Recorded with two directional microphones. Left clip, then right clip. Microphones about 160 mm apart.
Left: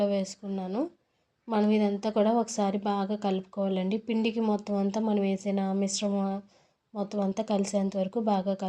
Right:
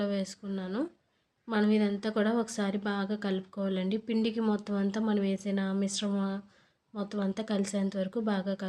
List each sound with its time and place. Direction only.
0.0 s a woman's voice: 5° left (ahead or behind)